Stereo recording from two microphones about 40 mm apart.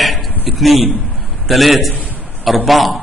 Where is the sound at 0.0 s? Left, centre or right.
Centre.